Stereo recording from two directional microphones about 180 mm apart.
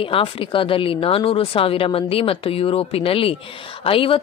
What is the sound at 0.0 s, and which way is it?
A woman's voice, 30° left (ahead or behind).